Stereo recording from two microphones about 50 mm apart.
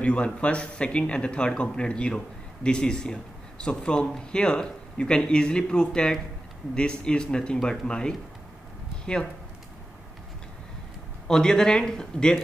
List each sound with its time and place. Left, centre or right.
0.0 s speech: left
11.2 s speech: centre